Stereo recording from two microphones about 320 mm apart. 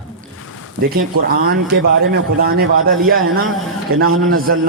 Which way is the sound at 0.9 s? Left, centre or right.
Right.